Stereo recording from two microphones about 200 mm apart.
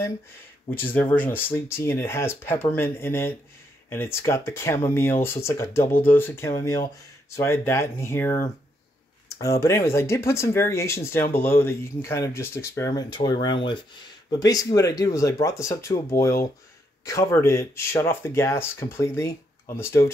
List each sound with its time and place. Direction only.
0.7 s speech: 10° left (ahead or behind)